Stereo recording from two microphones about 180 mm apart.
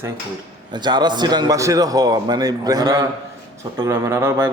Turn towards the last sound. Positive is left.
turn(degrees=-15)  # may be behind; listen again after turning